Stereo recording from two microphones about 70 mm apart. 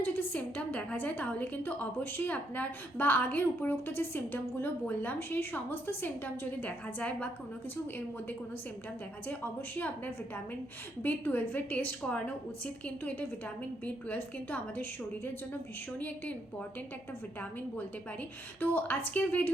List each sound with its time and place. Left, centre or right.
0.0 s a woman's voice: left
9.2 s a woman's voice: left
11.0 s a woman's voice: left
17.7 s a woman's voice: left